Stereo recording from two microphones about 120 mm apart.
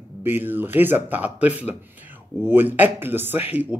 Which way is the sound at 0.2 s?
15° right (ahead or behind).